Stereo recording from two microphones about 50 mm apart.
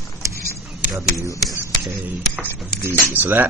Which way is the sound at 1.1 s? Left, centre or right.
Left.